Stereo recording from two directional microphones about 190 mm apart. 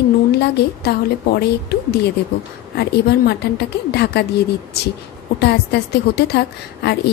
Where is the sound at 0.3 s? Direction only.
60° left (ahead or behind).